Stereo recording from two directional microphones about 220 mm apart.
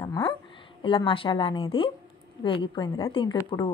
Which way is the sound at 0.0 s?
15° left (ahead or behind).